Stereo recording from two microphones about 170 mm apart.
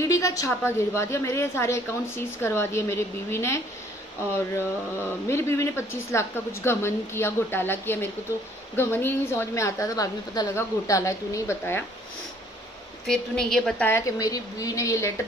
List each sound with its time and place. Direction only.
0.0 s a woman's voice: 20° left (ahead or behind)
5.3 s a woman's voice: 15° left (ahead or behind)
13.0 s a woman's voice: 5° left (ahead or behind)